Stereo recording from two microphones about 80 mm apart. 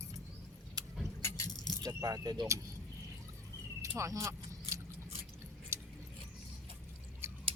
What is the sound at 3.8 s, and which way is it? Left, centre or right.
Vehicle, right.